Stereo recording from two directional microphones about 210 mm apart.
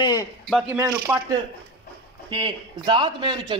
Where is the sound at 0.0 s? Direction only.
20° left (ahead or behind).